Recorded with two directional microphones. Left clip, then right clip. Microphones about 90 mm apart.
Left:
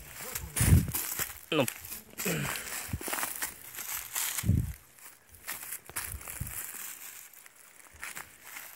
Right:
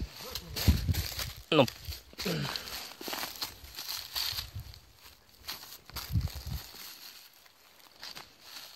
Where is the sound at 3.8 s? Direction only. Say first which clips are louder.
Right 2 dB; 45° right (ahead or behind).